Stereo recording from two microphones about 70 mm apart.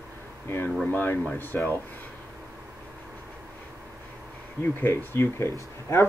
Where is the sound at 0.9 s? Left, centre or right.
Left.